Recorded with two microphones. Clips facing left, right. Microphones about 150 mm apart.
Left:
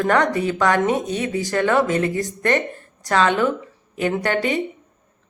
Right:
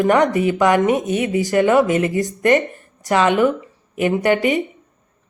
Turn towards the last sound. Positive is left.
turn(degrees=-15)  # may be behind; listen again after turning